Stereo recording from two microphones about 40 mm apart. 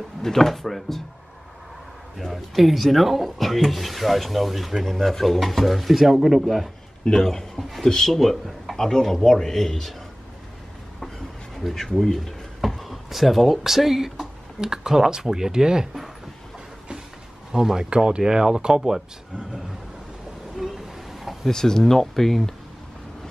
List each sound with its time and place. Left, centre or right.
0.2 s speech: centre
2.1 s speech: centre
7.1 s speech: centre
8.7 s speech: centre
11.7 s speech: centre
17.5 s speech: centre
20.5 s a sound: centre
21.5 s speech: centre